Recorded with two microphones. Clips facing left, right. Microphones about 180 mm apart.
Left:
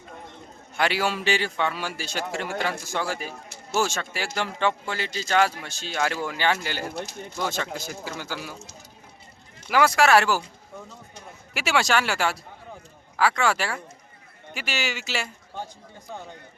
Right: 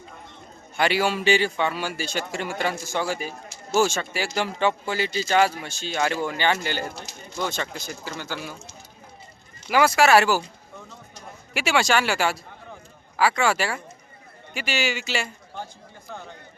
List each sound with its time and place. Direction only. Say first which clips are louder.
0.8 s speech: right 2 dB; centre (ahead or behind)
6.9 s speech: left 6 dB; 55° left (ahead or behind)
7.3 s speech: right 1 dB; 5° left (ahead or behind)
9.7 s speech: right 1 dB; centre (ahead or behind)
11.5 s speech: right 2 dB; centre (ahead or behind)